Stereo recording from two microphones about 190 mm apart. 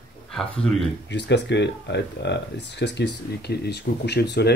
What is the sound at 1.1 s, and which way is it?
Speech, 65° left (ahead or behind).